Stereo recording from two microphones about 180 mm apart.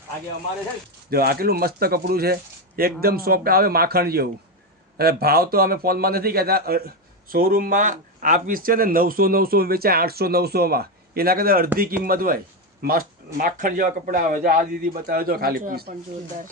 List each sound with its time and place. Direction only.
1.1 s a man's voice: 55° right (ahead or behind)